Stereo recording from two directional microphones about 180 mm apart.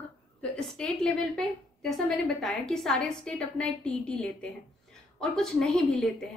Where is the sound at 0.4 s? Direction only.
5° left (ahead or behind).